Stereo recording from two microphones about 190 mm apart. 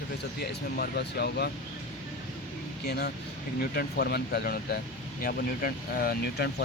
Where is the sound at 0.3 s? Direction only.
55° left (ahead or behind).